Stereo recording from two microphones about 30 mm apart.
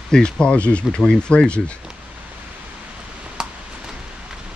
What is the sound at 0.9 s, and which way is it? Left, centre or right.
Speech, left.